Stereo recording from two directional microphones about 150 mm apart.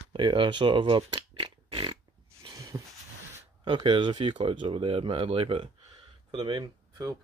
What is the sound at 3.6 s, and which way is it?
Speech, 30° right (ahead or behind).